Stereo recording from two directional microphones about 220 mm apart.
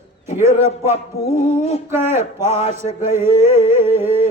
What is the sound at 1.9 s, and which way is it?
Speech, 10° right (ahead or behind).